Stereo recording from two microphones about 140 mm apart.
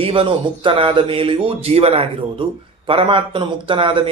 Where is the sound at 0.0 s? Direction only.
40° right (ahead or behind).